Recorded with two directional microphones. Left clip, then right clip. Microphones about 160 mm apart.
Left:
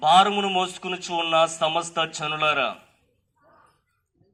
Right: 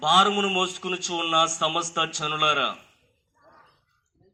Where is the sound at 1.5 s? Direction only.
20° left (ahead or behind).